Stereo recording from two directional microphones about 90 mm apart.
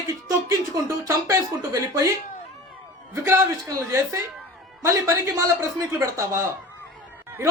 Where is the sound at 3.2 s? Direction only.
30° right (ahead or behind).